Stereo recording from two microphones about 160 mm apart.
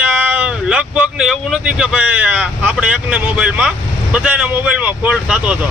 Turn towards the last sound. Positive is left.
turn(degrees=-5)  # may be behind; listen again after turning